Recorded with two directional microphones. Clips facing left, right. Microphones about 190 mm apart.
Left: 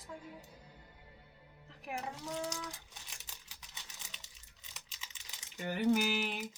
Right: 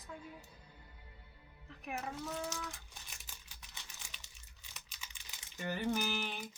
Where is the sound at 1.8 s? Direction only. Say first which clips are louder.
Even; 15° left (ahead or behind).